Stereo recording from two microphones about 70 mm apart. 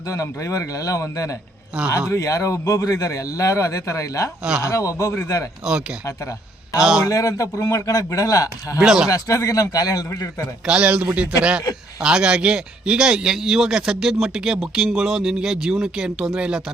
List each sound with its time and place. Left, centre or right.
0.1 s a man's voice: left
6.7 s speech: centre
7.0 s a man's voice: left
8.8 s speech: centre
9.0 s a man's voice: left
10.7 s speech: centre